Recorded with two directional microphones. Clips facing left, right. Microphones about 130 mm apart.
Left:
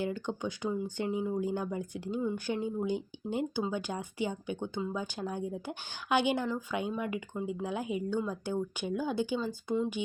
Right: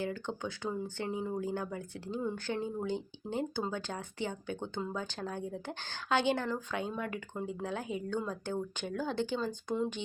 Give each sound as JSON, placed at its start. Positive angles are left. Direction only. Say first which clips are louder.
{"t": 0.0, "sound": "speech", "louder": "left 3 dB", "side_deg": 15}